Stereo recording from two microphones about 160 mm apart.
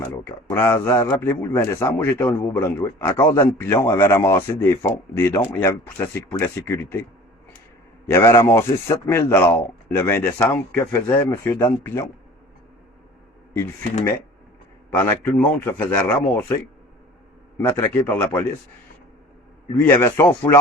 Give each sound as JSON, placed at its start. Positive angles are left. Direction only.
{"t": 0.3, "sound": "a man's voice", "side_deg": 15}
{"t": 8.1, "sound": "a man's voice", "side_deg": 20}
{"t": 14.8, "sound": "a man's voice", "side_deg": 15}
{"t": 17.6, "sound": "a man's voice", "side_deg": 15}
{"t": 19.8, "sound": "a man's voice", "side_deg": 15}